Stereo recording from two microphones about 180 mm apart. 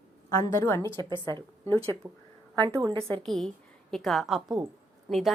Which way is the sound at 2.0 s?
15° right (ahead or behind).